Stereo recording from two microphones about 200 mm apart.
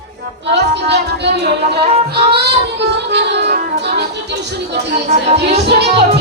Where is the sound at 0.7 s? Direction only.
60° right (ahead or behind).